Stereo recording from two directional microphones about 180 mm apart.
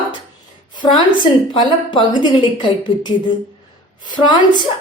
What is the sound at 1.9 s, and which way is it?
A woman's voice, 25° left (ahead or behind).